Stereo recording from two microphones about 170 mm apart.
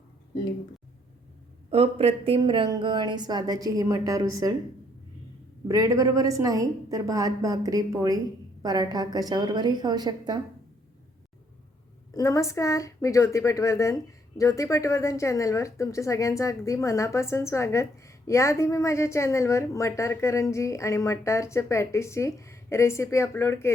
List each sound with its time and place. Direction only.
1.7 s speech: 35° right (ahead or behind); by 4.5 s 20° right (ahead or behind)
5.6 s speech: 20° right (ahead or behind)
12.1 s speech: 20° left (ahead or behind)